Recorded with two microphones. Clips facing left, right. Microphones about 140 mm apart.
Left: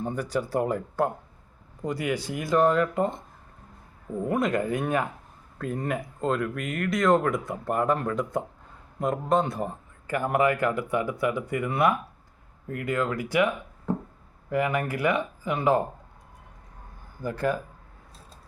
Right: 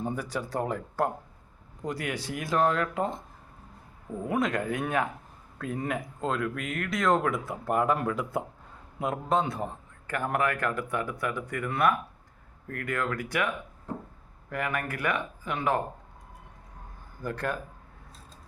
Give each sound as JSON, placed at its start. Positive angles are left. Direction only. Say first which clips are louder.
{"t": 0.0, "sound": "speech", "louder": "left 4 dB", "side_deg": -5}
{"t": 4.3, "sound": "speech", "louder": "left 3 dB", "side_deg": 0}
{"t": 14.5, "sound": "speech", "louder": "left 6 dB", "side_deg": 10}
{"t": 17.2, "sound": "speech", "louder": "left 5 dB", "side_deg": 5}